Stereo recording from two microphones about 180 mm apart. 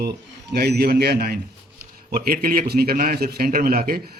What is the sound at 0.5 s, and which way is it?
A man's voice, 60° right (ahead or behind).